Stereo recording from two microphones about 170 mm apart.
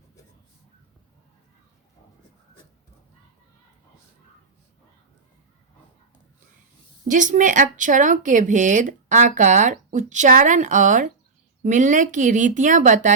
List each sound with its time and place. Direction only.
7.1 s speech: 50° right (ahead or behind)